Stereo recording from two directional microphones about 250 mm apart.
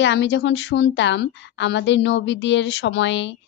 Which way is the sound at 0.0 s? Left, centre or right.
Left.